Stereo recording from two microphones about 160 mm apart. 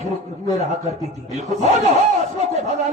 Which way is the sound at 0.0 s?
45° right (ahead or behind).